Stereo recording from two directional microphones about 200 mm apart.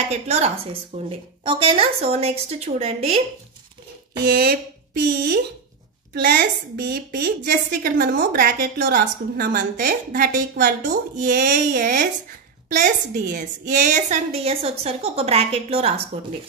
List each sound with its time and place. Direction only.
0.1 s a woman's voice: 35° right (ahead or behind)
4.3 s a woman's voice: 50° right (ahead or behind); by 16.3 s 30° right (ahead or behind)